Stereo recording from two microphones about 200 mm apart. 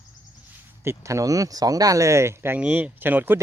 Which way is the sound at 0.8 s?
15° right (ahead or behind).